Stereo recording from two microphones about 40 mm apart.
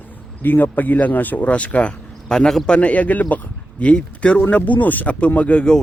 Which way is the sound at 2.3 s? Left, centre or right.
Centre.